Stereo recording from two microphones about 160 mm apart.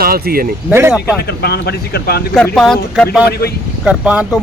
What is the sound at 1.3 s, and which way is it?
Speech, 90° left.